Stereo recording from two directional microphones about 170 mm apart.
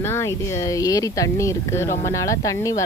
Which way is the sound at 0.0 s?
15° left (ahead or behind).